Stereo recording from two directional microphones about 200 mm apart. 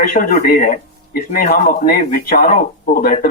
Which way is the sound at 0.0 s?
45° left (ahead or behind).